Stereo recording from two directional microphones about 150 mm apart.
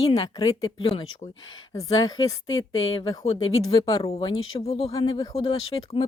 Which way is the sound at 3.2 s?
40° left (ahead or behind).